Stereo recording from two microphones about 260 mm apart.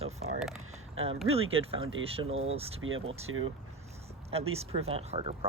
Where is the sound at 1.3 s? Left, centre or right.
Right.